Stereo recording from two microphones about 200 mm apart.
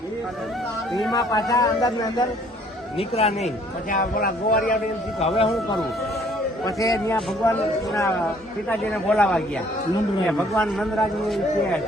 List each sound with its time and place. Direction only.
1.1 s speech: 20° left (ahead or behind)
3.0 s speech: 30° left (ahead or behind)
3.9 s speech: 45° left (ahead or behind)
5.2 s speech: 30° left (ahead or behind)
6.7 s a man's voice: 15° left (ahead or behind)